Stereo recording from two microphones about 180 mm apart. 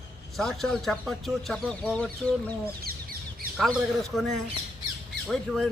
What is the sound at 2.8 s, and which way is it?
Bird, 55° right (ahead or behind).